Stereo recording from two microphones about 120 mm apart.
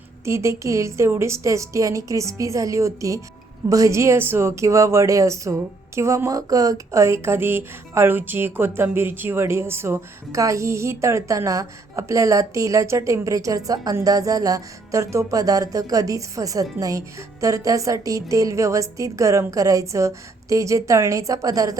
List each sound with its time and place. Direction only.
0.3 s speech: 25° right (ahead or behind)